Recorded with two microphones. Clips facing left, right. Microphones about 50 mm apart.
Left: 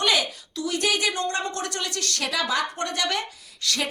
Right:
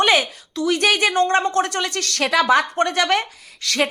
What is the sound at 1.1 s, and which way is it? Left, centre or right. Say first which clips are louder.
Speech: right 10 dB; right.